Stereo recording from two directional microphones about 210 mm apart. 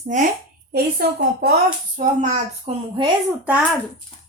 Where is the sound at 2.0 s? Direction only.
35° right (ahead or behind).